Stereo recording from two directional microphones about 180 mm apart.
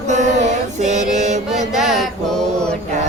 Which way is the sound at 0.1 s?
40° right (ahead or behind).